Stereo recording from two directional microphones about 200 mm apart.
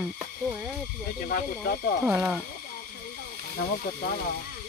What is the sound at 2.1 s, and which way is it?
Speech, 5° right (ahead or behind).